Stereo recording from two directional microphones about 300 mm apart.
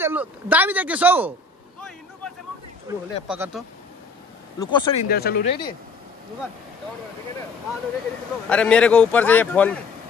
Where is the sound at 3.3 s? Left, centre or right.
Centre.